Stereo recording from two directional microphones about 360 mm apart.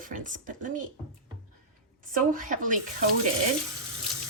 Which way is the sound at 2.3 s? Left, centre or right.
Right.